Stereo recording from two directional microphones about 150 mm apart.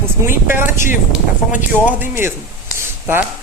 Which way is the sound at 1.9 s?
15° right (ahead or behind).